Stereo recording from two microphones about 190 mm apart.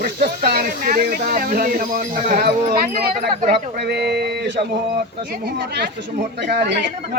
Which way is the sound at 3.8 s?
60° right (ahead or behind).